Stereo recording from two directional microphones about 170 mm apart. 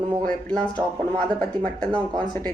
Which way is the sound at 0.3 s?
5° left (ahead or behind).